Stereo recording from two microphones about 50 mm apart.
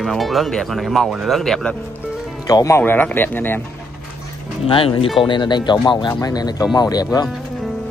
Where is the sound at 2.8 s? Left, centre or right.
Left.